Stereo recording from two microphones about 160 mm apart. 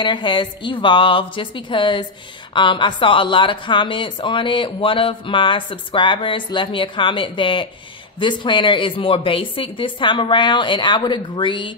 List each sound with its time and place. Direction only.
0.0 s speech: 30° left (ahead or behind)